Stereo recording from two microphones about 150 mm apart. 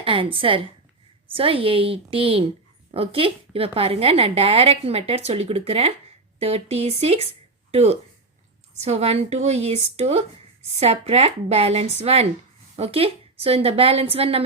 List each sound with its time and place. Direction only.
0.0 s a woman's voice: 35° right (ahead or behind)